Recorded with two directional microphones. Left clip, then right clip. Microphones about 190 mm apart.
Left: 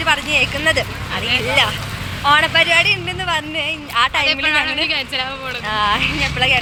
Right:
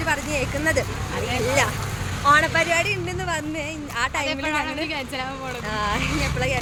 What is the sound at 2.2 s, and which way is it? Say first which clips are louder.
Speech: left 4 dB; 5° right (ahead or behind).